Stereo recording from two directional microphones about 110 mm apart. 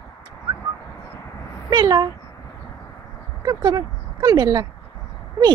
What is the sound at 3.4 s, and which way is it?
Speech, 40° right (ahead or behind).